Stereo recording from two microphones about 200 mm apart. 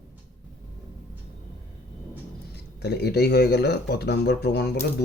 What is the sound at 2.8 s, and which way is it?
Speech, 55° left (ahead or behind).